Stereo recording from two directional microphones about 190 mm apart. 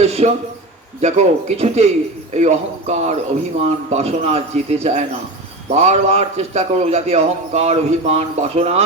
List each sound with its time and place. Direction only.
0.0 s a man's voice: 35° right (ahead or behind)